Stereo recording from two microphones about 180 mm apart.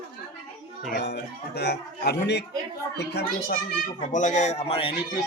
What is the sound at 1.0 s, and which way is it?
Speech, 65° left (ahead or behind).